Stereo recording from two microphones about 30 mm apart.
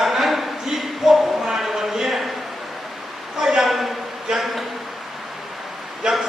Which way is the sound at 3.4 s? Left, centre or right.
Centre.